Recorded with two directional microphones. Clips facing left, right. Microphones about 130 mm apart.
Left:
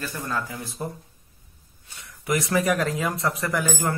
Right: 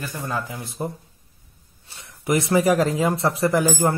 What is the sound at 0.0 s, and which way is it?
Speech, 20° right (ahead or behind).